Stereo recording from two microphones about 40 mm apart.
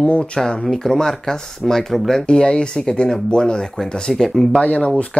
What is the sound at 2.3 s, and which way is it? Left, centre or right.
Speech, left.